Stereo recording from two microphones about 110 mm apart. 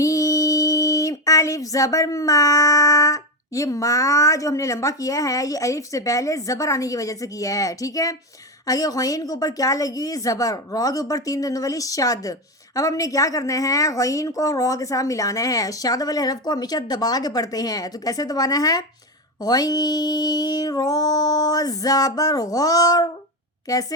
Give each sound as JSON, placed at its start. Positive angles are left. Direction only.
{"t": 0.0, "sound": "a woman's voice", "side_deg": 30}